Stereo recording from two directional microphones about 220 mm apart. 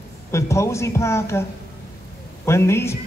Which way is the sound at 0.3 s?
15° left (ahead or behind).